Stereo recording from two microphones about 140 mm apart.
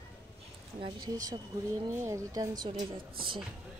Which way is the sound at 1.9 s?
20° right (ahead or behind).